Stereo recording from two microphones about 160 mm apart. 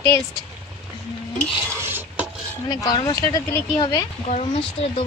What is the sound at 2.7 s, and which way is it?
Speech, 25° left (ahead or behind).